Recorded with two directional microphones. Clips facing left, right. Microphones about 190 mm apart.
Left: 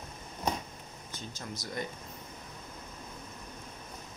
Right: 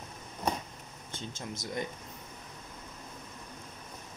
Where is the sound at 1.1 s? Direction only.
25° right (ahead or behind).